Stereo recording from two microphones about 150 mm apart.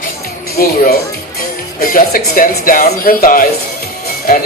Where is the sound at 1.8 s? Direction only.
75° left (ahead or behind).